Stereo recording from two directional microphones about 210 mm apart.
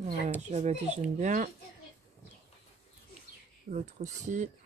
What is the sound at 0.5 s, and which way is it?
Speech, 30° right (ahead or behind).